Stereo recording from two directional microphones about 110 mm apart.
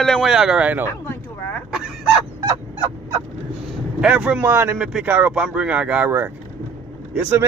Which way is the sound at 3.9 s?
10° right (ahead or behind).